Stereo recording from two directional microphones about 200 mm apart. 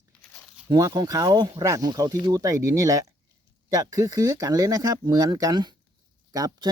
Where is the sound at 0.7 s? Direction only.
20° right (ahead or behind).